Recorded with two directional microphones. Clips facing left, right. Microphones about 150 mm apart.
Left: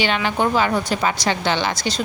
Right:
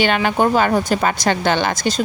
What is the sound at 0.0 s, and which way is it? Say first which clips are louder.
A woman's voice: right 4 dB; 50° right (ahead or behind).